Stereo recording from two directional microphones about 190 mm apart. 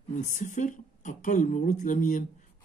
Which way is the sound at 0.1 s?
40° left (ahead or behind).